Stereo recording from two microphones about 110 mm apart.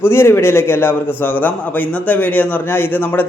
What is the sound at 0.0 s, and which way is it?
A man's voice, 20° left (ahead or behind).